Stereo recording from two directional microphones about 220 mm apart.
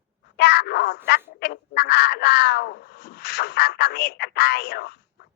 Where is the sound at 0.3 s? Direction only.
50° left (ahead or behind).